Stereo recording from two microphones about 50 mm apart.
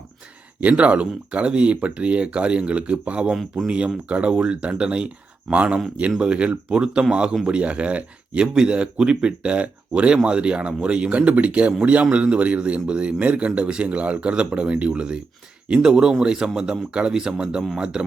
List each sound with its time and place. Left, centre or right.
0.6 s a man's voice: right